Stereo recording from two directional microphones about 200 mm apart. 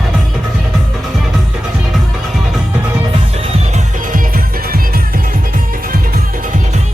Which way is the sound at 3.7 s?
45° right (ahead or behind).